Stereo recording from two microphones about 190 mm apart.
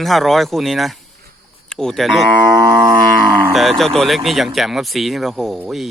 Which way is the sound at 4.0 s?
Centre (ahead or behind).